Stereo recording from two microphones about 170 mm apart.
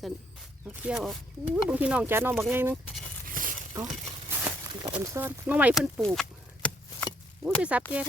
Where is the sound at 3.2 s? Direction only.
55° right (ahead or behind).